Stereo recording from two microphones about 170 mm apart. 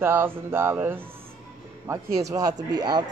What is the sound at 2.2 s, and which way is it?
Speech, 20° right (ahead or behind).